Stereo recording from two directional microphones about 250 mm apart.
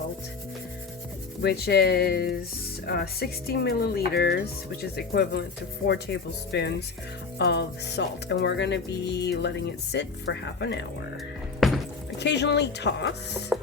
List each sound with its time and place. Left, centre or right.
1.4 s speech: left
11.6 s a sound: centre
12.2 s speech: left